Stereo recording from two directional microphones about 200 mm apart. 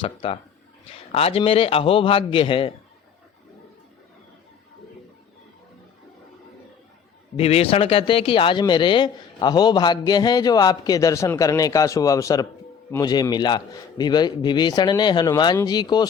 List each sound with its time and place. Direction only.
0.0 s a man's voice: 25° left (ahead or behind)
7.3 s a man's voice: 30° left (ahead or behind)